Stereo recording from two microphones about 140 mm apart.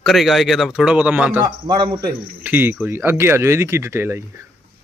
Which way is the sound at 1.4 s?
30° right (ahead or behind).